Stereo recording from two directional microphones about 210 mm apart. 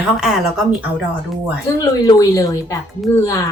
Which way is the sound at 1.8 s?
15° left (ahead or behind).